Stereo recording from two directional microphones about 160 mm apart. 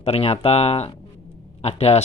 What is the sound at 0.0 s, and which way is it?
Speech, 40° left (ahead or behind).